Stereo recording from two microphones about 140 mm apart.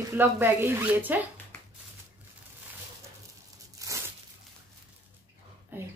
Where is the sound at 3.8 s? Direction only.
25° right (ahead or behind).